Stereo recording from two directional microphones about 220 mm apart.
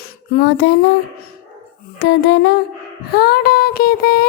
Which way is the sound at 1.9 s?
50° left (ahead or behind).